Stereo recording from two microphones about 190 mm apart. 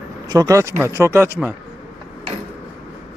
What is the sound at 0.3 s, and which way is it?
Speech, 20° right (ahead or behind).